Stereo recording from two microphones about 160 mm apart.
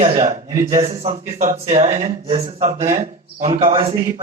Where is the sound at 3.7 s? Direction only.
35° right (ahead or behind).